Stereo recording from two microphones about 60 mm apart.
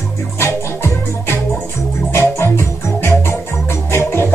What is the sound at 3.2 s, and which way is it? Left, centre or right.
Organ, left.